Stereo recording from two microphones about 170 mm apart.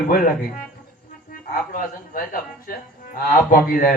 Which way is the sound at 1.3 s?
55° left (ahead or behind).